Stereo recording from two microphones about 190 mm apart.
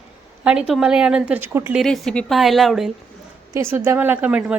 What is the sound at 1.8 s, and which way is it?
A woman's voice, 5° left (ahead or behind).